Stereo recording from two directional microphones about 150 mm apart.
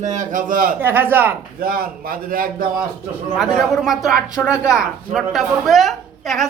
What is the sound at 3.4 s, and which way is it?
A woman's voice, 5° right (ahead or behind).